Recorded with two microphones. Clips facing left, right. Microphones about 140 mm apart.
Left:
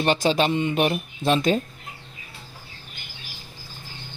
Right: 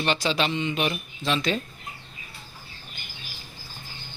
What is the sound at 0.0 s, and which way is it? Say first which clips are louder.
Speech: left 5 dB; 45° left (ahead or behind).